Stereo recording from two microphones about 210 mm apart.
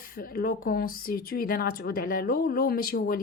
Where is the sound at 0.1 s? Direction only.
45° left (ahead or behind).